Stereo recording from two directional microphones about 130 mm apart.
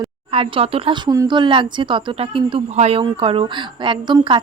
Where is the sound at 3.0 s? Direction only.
45° right (ahead or behind).